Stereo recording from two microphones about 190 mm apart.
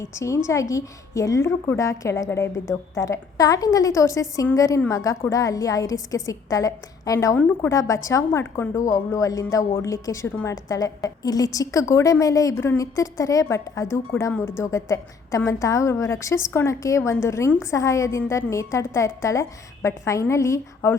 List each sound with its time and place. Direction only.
0.0 s a woman's voice: 15° left (ahead or behind)